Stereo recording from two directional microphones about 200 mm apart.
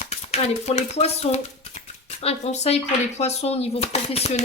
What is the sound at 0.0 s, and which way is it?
Speech, 30° left (ahead or behind).